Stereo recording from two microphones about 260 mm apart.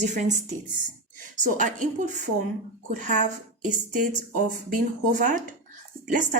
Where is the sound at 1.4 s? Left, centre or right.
Right.